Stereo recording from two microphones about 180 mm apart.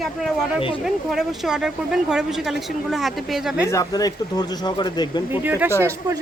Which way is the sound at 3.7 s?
20° left (ahead or behind).